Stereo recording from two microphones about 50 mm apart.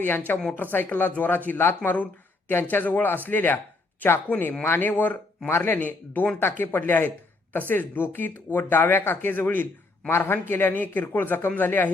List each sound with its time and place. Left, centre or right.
0.0 s speech: left
5.5 s speech: left
5.7 s speech: left